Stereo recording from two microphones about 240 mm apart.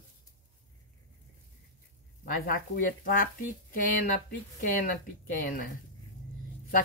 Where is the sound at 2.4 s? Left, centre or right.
Left.